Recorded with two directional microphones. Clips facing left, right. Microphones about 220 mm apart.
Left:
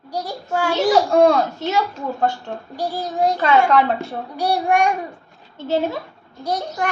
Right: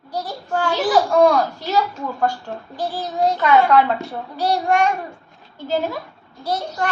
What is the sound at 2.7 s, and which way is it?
Speech, 10° left (ahead or behind).